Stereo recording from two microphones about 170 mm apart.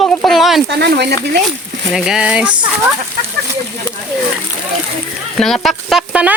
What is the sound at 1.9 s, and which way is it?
Speech, 5° right (ahead or behind).